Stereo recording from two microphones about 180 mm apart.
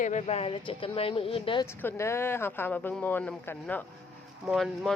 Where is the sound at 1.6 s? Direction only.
15° left (ahead or behind).